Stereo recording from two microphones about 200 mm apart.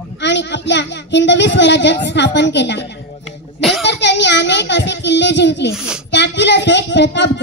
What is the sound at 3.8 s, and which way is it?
A woman's voice, 60° left (ahead or behind).